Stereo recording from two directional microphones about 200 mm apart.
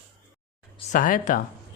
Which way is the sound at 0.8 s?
40° left (ahead or behind).